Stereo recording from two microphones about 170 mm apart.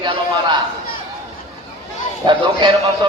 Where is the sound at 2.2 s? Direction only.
25° right (ahead or behind).